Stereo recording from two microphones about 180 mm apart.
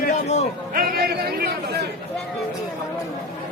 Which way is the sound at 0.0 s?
40° left (ahead or behind).